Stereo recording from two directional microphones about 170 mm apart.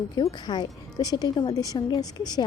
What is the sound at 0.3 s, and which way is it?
A woman's voice, 25° left (ahead or behind).